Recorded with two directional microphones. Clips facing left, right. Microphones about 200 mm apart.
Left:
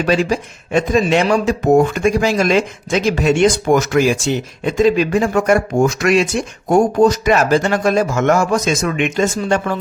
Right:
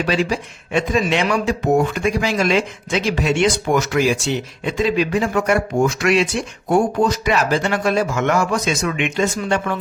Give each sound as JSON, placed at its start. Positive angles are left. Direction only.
{"t": 0.0, "sound": "speech", "side_deg": 45}